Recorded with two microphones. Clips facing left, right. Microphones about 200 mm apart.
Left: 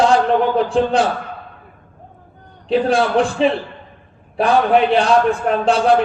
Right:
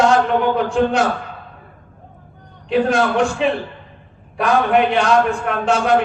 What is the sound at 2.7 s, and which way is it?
A man's voice, 35° left (ahead or behind).